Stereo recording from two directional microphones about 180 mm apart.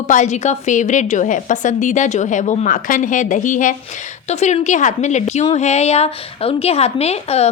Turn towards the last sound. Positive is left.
turn(degrees=35)  # may be behind; listen again after turning